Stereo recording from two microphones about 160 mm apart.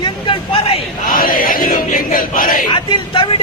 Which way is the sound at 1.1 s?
60° left (ahead or behind).